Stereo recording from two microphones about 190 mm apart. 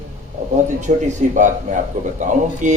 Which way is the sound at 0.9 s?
45° right (ahead or behind).